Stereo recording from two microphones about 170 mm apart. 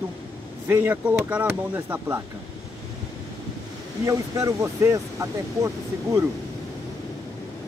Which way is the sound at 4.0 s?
20° right (ahead or behind).